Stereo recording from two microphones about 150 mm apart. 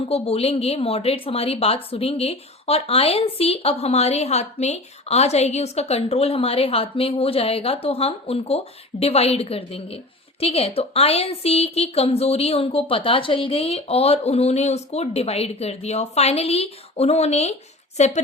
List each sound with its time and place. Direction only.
0.0 s a woman's voice: 40° left (ahead or behind)